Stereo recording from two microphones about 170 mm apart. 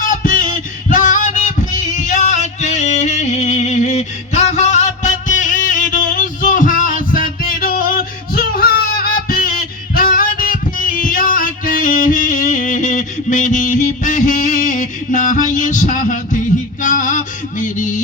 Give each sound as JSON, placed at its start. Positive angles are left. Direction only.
{"t": 0.1, "sound": "music", "side_deg": 50}